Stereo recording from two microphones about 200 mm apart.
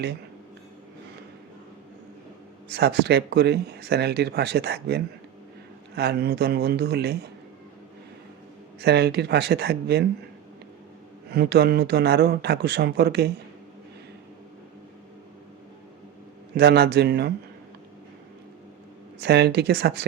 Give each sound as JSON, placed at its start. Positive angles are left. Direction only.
{"t": 2.6, "sound": "speech", "side_deg": -55}
{"t": 8.8, "sound": "speech", "side_deg": -55}
{"t": 11.3, "sound": "speech", "side_deg": -50}
{"t": 16.6, "sound": "speech", "side_deg": -55}
{"t": 19.2, "sound": "speech", "side_deg": -55}